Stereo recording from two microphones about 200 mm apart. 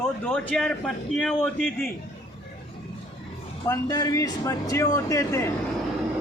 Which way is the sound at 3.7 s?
20° left (ahead or behind).